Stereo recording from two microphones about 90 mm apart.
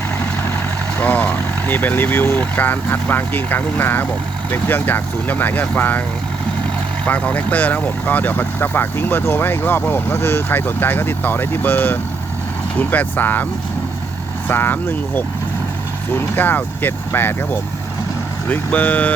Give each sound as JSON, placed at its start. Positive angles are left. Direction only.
{"t": 0.9, "sound": "speech", "side_deg": 15}
{"t": 7.0, "sound": "speech", "side_deg": 15}